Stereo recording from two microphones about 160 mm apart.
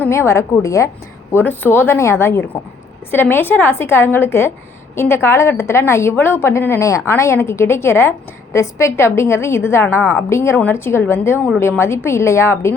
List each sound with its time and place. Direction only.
0.0 s a woman's voice: 15° left (ahead or behind)